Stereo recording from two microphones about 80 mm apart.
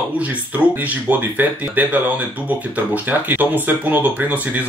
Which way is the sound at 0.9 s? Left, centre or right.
Centre.